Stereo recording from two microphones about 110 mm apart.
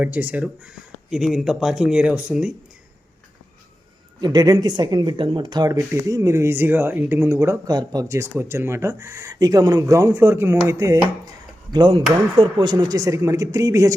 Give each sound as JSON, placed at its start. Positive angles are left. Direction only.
{"t": 0.0, "sound": "speech", "side_deg": -15}
{"t": 4.2, "sound": "speech", "side_deg": -40}
{"t": 7.7, "sound": "speech", "side_deg": -35}
{"t": 11.7, "sound": "speech", "side_deg": -45}